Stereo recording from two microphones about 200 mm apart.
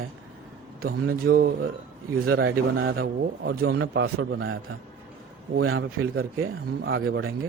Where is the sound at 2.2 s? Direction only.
90° right.